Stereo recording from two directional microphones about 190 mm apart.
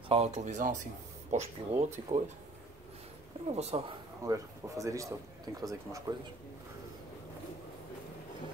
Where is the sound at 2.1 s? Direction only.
40° right (ahead or behind).